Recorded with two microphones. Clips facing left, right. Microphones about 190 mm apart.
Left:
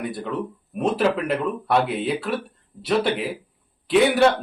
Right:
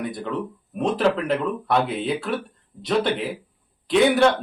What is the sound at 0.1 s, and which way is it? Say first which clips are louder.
A man's voice: even; centre (ahead or behind).